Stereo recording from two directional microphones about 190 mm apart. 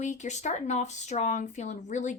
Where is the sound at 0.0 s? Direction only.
40° left (ahead or behind).